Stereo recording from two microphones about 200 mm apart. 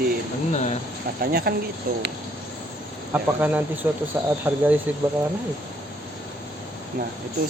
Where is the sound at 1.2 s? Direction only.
50° right (ahead or behind).